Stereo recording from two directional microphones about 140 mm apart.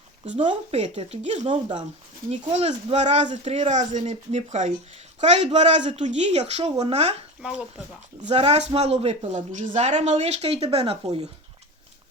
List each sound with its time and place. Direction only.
0.3 s speech: 45° right (ahead or behind)
1.5 s speech: 35° right (ahead or behind)
2.3 s speech: 50° right (ahead or behind)
8.2 s speech: 50° right (ahead or behind)